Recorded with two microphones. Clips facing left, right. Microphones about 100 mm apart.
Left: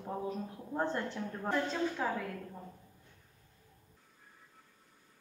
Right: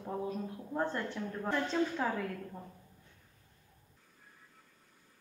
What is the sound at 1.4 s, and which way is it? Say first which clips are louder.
Speech: right 1 dB; 5° left (ahead or behind).